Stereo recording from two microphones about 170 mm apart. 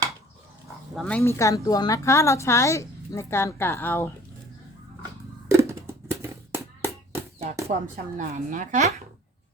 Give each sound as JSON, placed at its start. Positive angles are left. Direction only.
{"t": 0.9, "sound": "a woman's voice", "side_deg": 5}
{"t": 5.5, "sound": "a sound", "side_deg": -15}
{"t": 7.7, "sound": "a woman's voice", "side_deg": -50}